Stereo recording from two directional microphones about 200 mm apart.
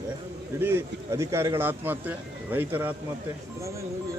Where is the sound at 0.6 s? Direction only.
15° right (ahead or behind).